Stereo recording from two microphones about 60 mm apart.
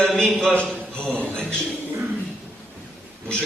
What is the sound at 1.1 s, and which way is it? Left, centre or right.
Speech, centre.